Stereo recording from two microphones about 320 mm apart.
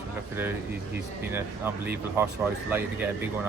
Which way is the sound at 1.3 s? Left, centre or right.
Centre.